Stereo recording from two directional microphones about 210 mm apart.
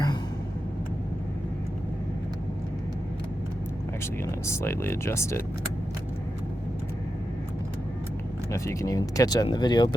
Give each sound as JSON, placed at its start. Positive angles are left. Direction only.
{"t": 4.0, "sound": "speech", "side_deg": 10}
{"t": 8.5, "sound": "speech", "side_deg": 15}